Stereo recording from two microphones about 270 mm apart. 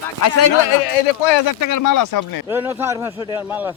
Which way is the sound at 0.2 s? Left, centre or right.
Left.